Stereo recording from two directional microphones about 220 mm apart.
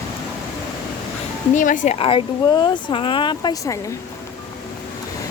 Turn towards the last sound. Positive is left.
turn(degrees=15)  # may be behind; listen again after turning